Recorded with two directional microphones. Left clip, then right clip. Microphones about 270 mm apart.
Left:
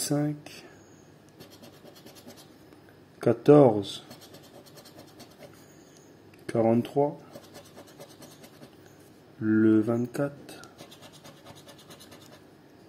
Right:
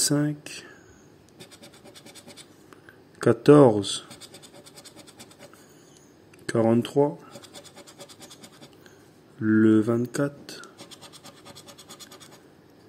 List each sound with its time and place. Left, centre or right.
0.1 s speech: centre
3.2 s speech: centre
6.4 s speech: centre
9.4 s speech: centre